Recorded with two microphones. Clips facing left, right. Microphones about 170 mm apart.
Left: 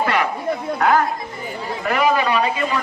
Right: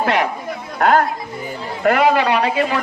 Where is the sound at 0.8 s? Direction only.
65° right (ahead or behind).